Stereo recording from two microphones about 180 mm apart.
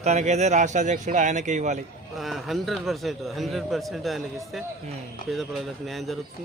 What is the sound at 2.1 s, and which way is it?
A man's voice, centre (ahead or behind).